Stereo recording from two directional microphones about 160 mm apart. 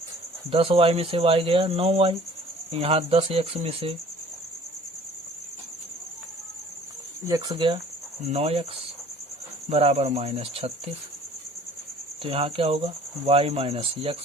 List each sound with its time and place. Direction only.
0.5 s cricket: 35° right (ahead or behind)
7.3 s speech: 25° right (ahead or behind)
8.3 s cricket: 40° right (ahead or behind)
9.6 s cricket: 40° right (ahead or behind)
12.2 s cricket: 35° right (ahead or behind)